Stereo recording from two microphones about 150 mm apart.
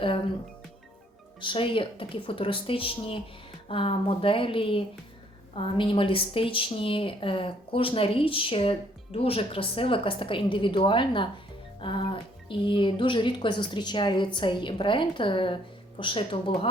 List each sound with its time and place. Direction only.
1.4 s speech: 35° left (ahead or behind)